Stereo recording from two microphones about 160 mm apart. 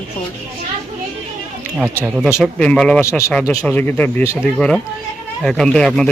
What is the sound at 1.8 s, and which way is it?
Speech, 15° right (ahead or behind).